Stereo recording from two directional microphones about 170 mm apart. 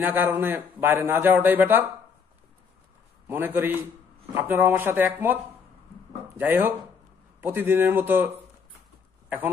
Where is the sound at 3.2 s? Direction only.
10° right (ahead or behind).